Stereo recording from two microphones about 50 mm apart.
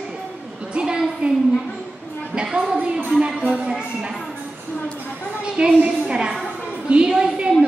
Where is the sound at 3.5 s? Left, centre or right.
Centre.